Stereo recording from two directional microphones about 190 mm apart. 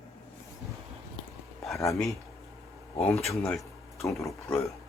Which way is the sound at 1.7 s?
15° left (ahead or behind).